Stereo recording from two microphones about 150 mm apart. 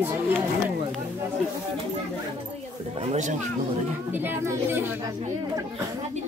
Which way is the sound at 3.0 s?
50° right (ahead or behind).